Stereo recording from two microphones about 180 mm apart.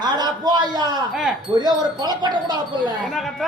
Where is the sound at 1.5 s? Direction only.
25° right (ahead or behind).